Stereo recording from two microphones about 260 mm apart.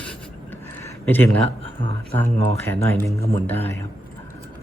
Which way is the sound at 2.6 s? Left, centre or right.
Centre.